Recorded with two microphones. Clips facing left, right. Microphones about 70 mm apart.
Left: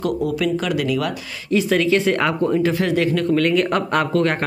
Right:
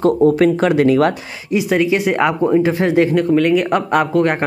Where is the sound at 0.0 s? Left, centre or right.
Right.